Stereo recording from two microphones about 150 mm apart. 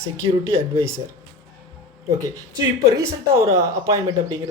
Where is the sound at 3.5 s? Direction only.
20° right (ahead or behind).